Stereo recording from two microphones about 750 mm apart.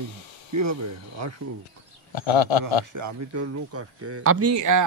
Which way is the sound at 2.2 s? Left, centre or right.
Left.